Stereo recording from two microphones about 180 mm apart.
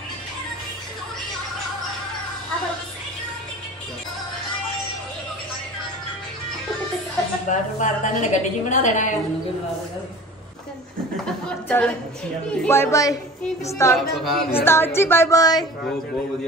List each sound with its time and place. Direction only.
7.4 s a woman's voice: 45° left (ahead or behind)
11.4 s a woman's voice: 5° left (ahead or behind)
13.9 s speech: centre (ahead or behind)
14.5 s a woman's voice: 10° left (ahead or behind)